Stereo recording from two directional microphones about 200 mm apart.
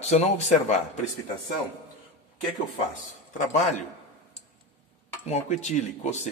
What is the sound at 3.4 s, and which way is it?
Speech, 35° left (ahead or behind).